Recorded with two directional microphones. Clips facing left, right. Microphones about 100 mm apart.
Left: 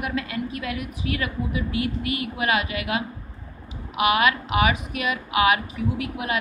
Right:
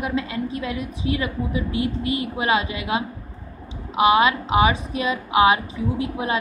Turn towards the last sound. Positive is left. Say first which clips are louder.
# right 3 dB
turn(degrees=-30)  # may be behind; listen again after turning